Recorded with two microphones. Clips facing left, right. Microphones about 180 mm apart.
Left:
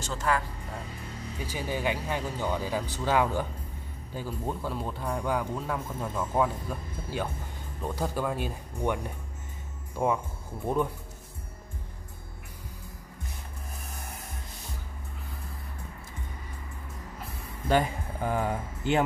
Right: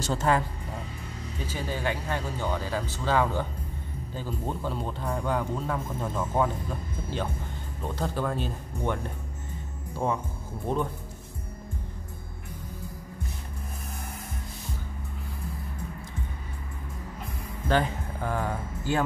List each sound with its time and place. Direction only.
0.0 s speech: 30° right (ahead or behind)
1.4 s speech: 15° left (ahead or behind)
7.8 s speech: 10° left (ahead or behind)
17.6 s speech: 10° left (ahead or behind)